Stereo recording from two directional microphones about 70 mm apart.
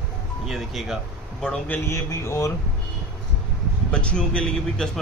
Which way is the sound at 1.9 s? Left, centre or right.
Left.